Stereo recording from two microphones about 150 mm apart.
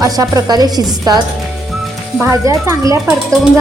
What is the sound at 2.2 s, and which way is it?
Speech, 20° right (ahead or behind).